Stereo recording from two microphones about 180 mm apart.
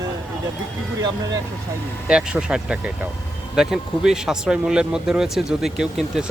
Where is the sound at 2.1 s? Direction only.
5° right (ahead or behind).